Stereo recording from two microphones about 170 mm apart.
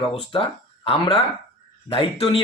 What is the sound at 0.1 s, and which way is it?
Speech, 30° left (ahead or behind).